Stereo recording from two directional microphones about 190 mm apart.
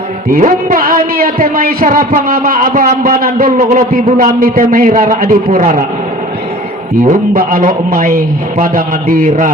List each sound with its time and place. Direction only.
0.3 s a man's voice: 45° right (ahead or behind)
7.0 s a man's voice: 45° right (ahead or behind)